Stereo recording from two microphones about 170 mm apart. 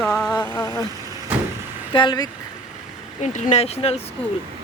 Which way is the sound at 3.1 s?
40° left (ahead or behind).